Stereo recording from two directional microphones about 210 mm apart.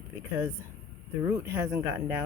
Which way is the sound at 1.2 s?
10° right (ahead or behind).